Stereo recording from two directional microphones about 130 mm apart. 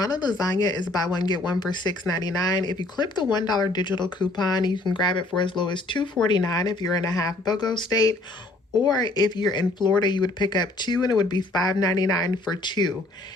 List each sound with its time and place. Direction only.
0.0 s speech: 30° left (ahead or behind)